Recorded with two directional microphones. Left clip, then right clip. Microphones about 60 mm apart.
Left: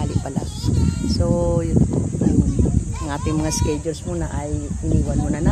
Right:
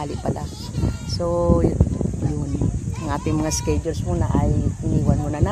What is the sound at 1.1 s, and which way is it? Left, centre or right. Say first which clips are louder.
Speech: right 1 dB; centre.